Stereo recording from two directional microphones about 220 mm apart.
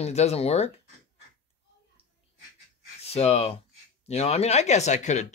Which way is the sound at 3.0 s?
30° left (ahead or behind).